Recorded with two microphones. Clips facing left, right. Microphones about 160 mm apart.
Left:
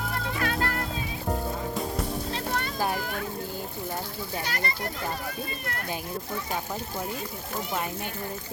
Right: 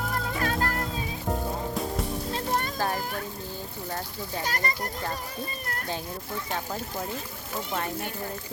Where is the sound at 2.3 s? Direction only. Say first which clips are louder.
Right 2 dB; 40° right (ahead or behind).